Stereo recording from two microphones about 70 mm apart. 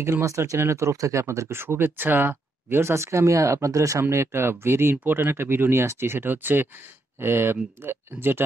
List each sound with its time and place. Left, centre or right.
0.0 s speech: right
4.0 s speech: right